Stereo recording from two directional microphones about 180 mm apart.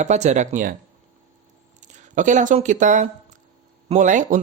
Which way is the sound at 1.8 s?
45° right (ahead or behind).